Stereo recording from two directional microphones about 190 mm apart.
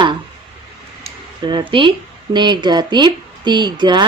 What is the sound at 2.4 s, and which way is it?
A woman's voice, 25° right (ahead or behind).